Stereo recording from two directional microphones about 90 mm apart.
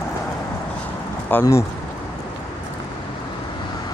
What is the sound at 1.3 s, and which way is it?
Speech, 25° left (ahead or behind).